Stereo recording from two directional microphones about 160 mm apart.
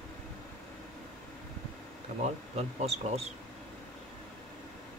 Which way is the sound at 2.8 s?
40° right (ahead or behind).